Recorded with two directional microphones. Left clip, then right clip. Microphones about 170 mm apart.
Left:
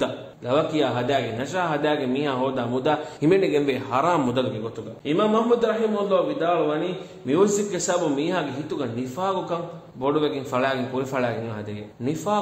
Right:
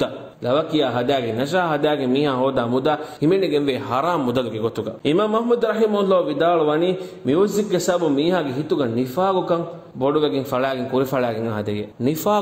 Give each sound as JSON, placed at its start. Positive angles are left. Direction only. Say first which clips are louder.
{"t": 0.0, "sound": "a man's voice", "louder": "right 3 dB", "side_deg": -25}
{"t": 4.4, "sound": "a man's voice", "louder": "right 4 dB", "side_deg": -50}
{"t": 7.2, "sound": "a man's voice", "louder": "right 2 dB", "side_deg": -35}